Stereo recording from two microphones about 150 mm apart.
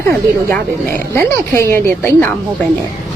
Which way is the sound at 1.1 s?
15° left (ahead or behind).